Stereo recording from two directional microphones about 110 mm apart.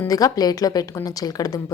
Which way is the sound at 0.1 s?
35° left (ahead or behind).